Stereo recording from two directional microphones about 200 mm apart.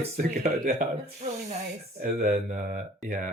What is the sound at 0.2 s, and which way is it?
Speech, 45° right (ahead or behind).